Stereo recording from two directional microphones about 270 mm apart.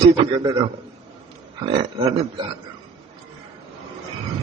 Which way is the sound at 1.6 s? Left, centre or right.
Right.